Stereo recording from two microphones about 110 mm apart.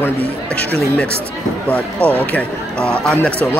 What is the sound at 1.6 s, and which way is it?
Speech, 10° left (ahead or behind).